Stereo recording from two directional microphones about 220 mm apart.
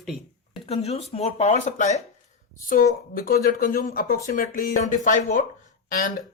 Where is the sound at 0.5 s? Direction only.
25° left (ahead or behind).